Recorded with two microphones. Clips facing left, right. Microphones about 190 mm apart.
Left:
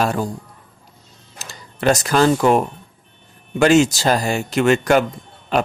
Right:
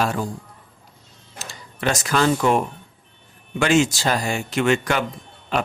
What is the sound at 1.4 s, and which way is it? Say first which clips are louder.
Speech: left 4 dB; 40° left (ahead or behind).